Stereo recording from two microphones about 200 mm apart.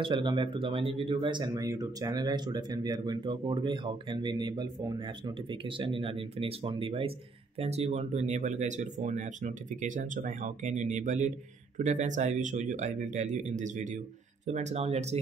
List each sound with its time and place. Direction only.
0.0 s speech: 25° right (ahead or behind)